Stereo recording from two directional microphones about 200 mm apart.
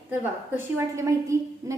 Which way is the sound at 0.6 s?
15° right (ahead or behind).